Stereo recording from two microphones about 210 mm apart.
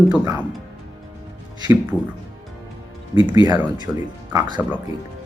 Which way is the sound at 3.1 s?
20° right (ahead or behind).